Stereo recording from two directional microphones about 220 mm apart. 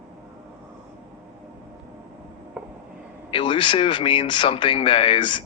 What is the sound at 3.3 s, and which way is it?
Speech, 20° left (ahead or behind).